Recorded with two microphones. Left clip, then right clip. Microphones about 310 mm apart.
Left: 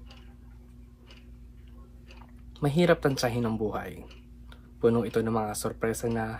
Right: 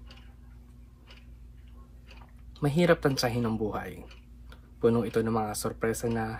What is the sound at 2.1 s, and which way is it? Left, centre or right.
Speech, centre.